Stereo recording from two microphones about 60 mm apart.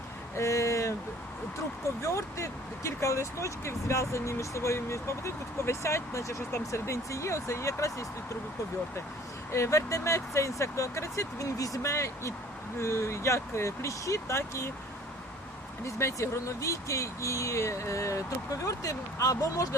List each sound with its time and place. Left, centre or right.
0.3 s a sound: left
2.0 s speech: left
9.5 s speech: left
16.0 s speech: left